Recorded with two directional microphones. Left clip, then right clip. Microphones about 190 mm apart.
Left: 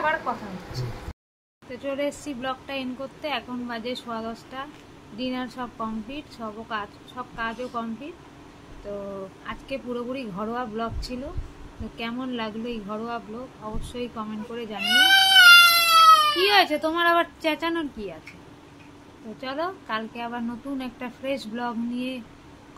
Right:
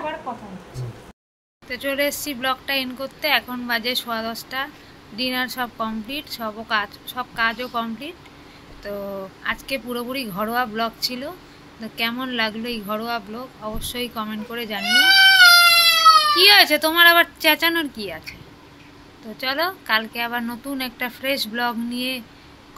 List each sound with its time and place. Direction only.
1.7 s a woman's voice: 5° left (ahead or behind)
14.8 s goat: 25° right (ahead or behind)
16.3 s a woman's voice: centre (ahead or behind)
19.3 s a woman's voice: 5° left (ahead or behind)